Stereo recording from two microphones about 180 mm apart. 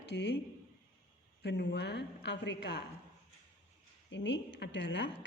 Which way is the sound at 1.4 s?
70° left (ahead or behind).